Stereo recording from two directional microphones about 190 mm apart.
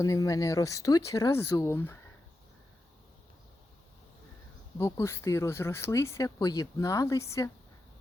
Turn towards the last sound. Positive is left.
turn(degrees=15)  # may be behind; listen again after turning